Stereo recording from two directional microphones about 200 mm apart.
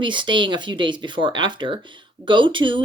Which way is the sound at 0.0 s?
25° right (ahead or behind).